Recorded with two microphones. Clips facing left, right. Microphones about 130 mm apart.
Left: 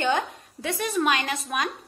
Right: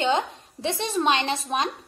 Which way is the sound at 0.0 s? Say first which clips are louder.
Right 1 dB; 25° right (ahead or behind).